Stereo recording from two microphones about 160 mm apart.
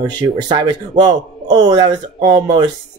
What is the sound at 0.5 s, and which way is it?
Speech, 25° right (ahead or behind).